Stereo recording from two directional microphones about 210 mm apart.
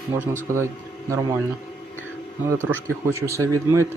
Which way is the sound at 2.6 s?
10° left (ahead or behind).